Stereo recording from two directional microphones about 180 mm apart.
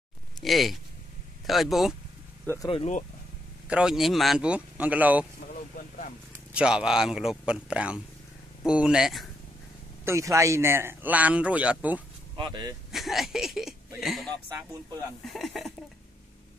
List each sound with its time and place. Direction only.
0.4 s a man's voice: centre (ahead or behind)
2.4 s speech: 15° left (ahead or behind)
2.7 s speech: 40° left (ahead or behind)
3.6 s a man's voice: 5° right (ahead or behind)
5.8 s vehicle: 45° left (ahead or behind)
6.3 s a man's voice: 5° right (ahead or behind)
10.0 s a man's voice: 15° right (ahead or behind)
12.4 s speech: 25° right (ahead or behind)
12.9 s speech: centre (ahead or behind)
14.7 s speech: 20° right (ahead or behind)
15.2 s a man's voice: centre (ahead or behind)